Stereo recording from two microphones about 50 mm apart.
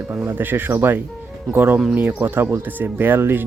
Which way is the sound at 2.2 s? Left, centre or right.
Right.